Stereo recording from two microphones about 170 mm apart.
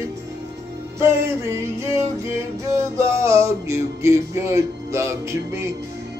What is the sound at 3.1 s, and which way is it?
Music, 15° right (ahead or behind).